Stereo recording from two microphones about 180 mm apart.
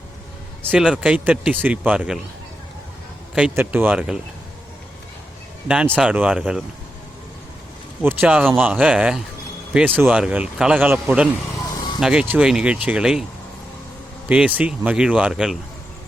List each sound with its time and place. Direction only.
0.6 s a man's voice: 5° right (ahead or behind)
3.3 s a man's voice: 10° right (ahead or behind)
5.6 s a man's voice: 5° right (ahead or behind)
8.0 s a man's voice: 10° right (ahead or behind)
11.6 s vehicle: 20° left (ahead or behind)
11.9 s speech: 5° right (ahead or behind)
14.3 s speech: 5° right (ahead or behind)